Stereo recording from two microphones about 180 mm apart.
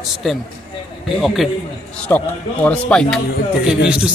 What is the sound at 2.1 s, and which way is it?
Speech, 15° left (ahead or behind).